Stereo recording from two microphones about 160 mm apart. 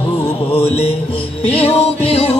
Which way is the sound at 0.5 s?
40° left (ahead or behind).